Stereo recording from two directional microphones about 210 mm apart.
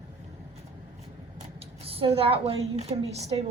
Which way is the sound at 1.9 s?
25° right (ahead or behind).